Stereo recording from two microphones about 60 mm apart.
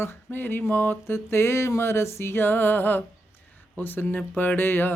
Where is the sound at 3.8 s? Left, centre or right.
Left.